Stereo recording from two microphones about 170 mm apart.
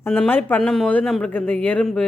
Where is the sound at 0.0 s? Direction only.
10° left (ahead or behind).